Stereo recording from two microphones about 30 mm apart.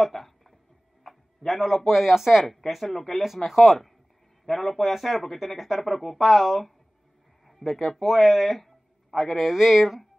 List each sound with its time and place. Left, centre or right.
0.0 s a sound: centre
1.0 s tick-tock: centre
1.9 s speech: centre